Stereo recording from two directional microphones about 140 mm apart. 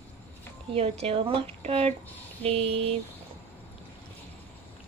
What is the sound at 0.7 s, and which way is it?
A woman's voice, 45° right (ahead or behind).